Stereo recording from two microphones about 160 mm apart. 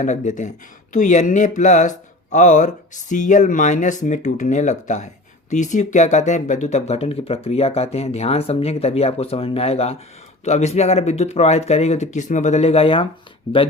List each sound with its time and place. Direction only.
0.0 s speech: 50° left (ahead or behind)